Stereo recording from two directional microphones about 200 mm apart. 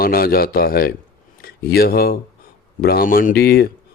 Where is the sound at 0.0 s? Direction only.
50° left (ahead or behind).